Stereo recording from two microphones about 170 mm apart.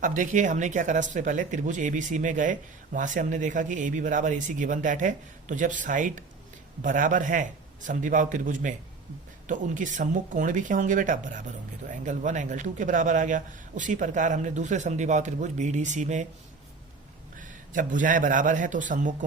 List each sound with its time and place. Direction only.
0.0 s speech: 50° right (ahead or behind)
17.3 s a man's voice: 50° right (ahead or behind)